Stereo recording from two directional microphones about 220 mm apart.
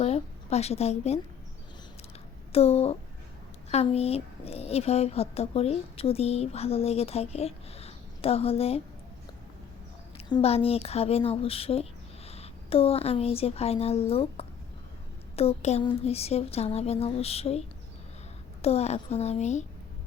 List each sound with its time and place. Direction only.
0.0 s a woman's voice: 30° left (ahead or behind)
2.5 s speech: 25° left (ahead or behind)
10.2 s speech: 25° left (ahead or behind)
18.6 s speech: 30° left (ahead or behind)